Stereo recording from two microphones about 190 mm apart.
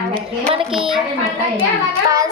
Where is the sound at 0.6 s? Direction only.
Centre (ahead or behind).